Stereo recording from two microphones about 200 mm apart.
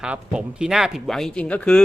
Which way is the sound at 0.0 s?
5° right (ahead or behind).